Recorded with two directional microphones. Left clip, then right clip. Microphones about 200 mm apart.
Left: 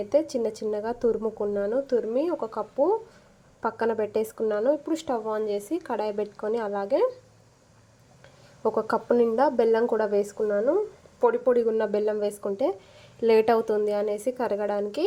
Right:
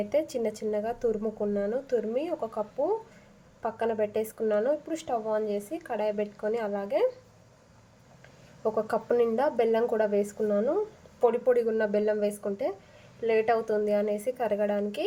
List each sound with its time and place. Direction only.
0.1 s speech: 15° left (ahead or behind)
8.7 s speech: 15° left (ahead or behind)